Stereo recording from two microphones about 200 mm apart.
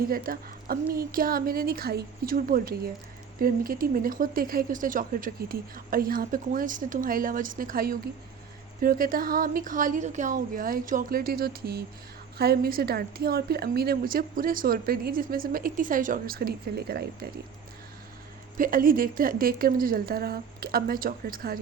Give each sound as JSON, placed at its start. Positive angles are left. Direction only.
{"t": 0.1, "sound": "speech", "side_deg": -45}
{"t": 18.5, "sound": "speech", "side_deg": -45}